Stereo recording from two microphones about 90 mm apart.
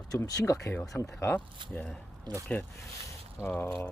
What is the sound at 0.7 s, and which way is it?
Speech, 20° left (ahead or behind).